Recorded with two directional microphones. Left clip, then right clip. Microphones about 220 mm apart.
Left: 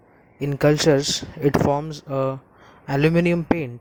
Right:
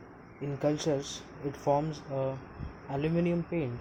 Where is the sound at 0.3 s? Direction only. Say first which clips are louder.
Left 12 dB; 45° left (ahead or behind).